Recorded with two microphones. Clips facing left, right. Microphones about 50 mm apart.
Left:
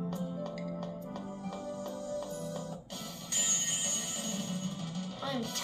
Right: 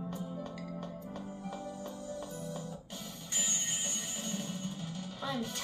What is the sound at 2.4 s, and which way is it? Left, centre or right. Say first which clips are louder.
Music: left 2 dB; left.